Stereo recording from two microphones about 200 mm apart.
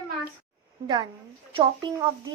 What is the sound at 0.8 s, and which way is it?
A woman's voice, 20° right (ahead or behind).